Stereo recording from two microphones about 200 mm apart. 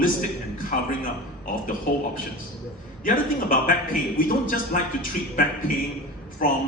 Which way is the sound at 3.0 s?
45° left (ahead or behind).